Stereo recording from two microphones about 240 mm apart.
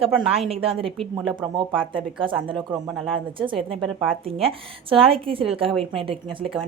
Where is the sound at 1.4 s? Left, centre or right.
Centre.